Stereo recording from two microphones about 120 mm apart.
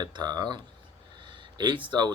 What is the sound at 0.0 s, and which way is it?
Speech, 35° right (ahead or behind).